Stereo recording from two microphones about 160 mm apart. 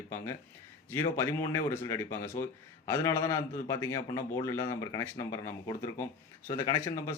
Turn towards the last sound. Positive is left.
turn(degrees=15)  # may be behind; listen again after turning